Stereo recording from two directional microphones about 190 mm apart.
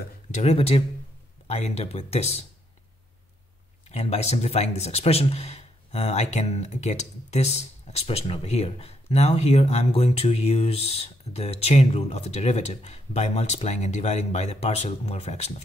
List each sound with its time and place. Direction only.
0.3 s speech: 35° left (ahead or behind)
3.9 s speech: 35° left (ahead or behind)